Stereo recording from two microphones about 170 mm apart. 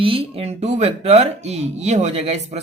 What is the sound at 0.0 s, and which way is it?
Speech, 35° right (ahead or behind).